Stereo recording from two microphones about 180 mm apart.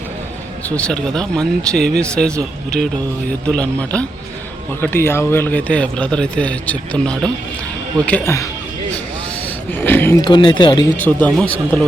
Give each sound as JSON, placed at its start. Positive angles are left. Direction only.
{"t": 0.7, "sound": "speech", "side_deg": 5}
{"t": 3.4, "sound": "a man's voice", "side_deg": 5}
{"t": 9.7, "sound": "speech", "side_deg": 10}
{"t": 10.2, "sound": "speech", "side_deg": 25}
{"t": 11.0, "sound": "a man's voice", "side_deg": 5}